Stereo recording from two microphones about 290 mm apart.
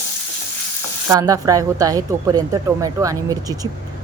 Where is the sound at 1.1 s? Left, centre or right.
Centre.